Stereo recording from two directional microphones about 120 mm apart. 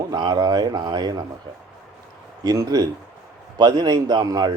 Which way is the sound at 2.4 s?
30° right (ahead or behind).